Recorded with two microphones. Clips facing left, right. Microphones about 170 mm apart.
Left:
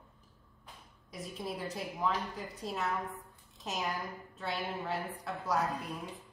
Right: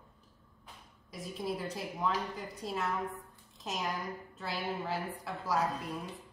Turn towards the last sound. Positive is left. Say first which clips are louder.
# right 1 dB
turn(degrees=0)  # may be behind; listen again after turning